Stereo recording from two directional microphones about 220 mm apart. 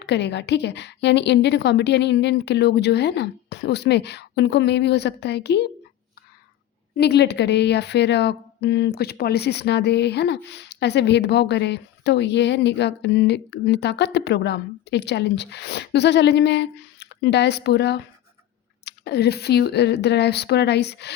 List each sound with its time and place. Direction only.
0.0 s a woman's voice: 50° left (ahead or behind)
6.9 s a woman's voice: 50° left (ahead or behind)